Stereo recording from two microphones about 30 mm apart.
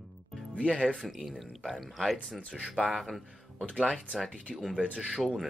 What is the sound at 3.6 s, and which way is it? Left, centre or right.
Speech, left.